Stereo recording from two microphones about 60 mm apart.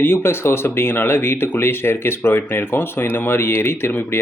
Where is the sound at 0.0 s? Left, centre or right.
Left.